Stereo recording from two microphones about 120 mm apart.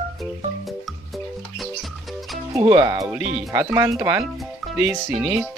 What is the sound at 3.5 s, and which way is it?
Speech, 20° right (ahead or behind).